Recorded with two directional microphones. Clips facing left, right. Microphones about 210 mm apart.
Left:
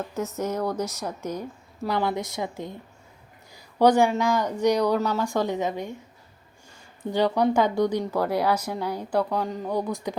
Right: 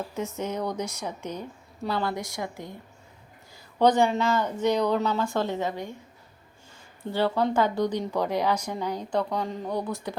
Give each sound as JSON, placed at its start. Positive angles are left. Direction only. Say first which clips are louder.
{"t": 0.3, "sound": "a woman's voice", "louder": "left 4 dB", "side_deg": 5}
{"t": 3.8, "sound": "a woman's voice", "louder": "left 2 dB", "side_deg": 10}
{"t": 7.1, "sound": "a woman's voice", "louder": "left 3 dB", "side_deg": 15}